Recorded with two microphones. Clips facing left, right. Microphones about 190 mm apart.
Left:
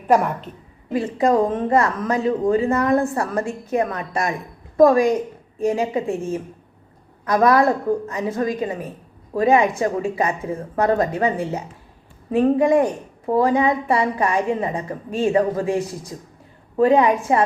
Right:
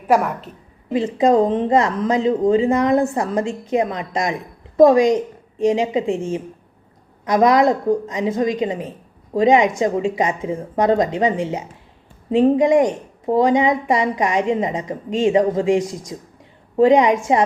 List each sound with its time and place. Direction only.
0.1 s a woman's voice: centre (ahead or behind)
0.9 s a woman's voice: 20° right (ahead or behind)
7.3 s a woman's voice: 15° right (ahead or behind)